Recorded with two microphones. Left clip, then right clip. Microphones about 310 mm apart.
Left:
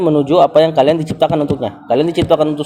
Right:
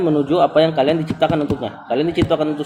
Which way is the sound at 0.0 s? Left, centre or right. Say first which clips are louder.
Left 5 dB; left.